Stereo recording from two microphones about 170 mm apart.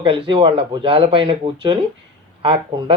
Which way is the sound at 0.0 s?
30° right (ahead or behind).